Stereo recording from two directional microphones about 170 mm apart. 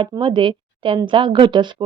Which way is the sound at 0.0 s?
30° right (ahead or behind).